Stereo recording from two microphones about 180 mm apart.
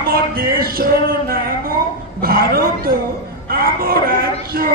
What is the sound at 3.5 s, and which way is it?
Speech, 55° right (ahead or behind).